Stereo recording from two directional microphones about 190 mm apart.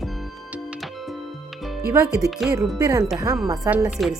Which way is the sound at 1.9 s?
15° right (ahead or behind).